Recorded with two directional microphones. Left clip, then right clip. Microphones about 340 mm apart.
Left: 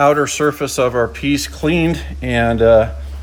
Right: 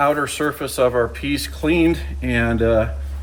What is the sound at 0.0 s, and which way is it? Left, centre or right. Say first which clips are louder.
Speech: left 5 dB; left.